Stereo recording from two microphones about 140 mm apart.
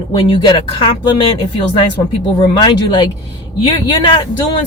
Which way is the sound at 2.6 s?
35° left (ahead or behind).